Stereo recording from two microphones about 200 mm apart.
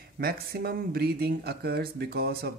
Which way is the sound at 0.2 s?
50° right (ahead or behind).